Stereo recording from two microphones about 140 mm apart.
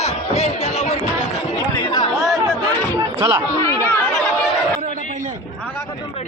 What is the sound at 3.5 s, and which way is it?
Chatter, 20° left (ahead or behind).